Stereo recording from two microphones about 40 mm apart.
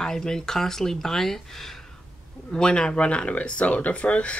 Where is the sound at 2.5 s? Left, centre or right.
Left.